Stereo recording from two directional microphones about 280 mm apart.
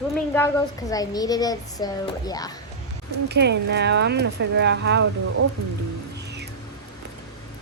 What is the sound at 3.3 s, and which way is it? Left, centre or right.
Speech, right.